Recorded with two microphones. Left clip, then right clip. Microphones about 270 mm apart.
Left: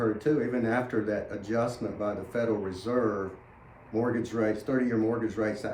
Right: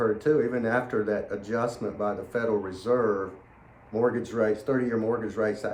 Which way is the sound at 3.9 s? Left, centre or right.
Centre.